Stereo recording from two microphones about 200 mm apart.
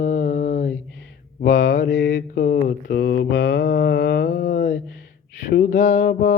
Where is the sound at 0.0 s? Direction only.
40° left (ahead or behind).